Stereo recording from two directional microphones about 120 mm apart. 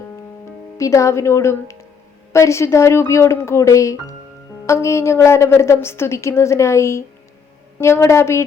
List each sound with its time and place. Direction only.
0.8 s a woman's voice: 25° left (ahead or behind)